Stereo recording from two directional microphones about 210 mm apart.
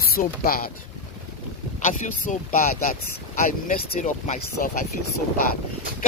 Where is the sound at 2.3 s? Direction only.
40° left (ahead or behind).